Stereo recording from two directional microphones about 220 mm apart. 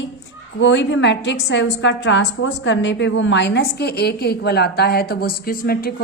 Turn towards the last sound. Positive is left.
turn(degrees=40)  # may be behind; listen again after turning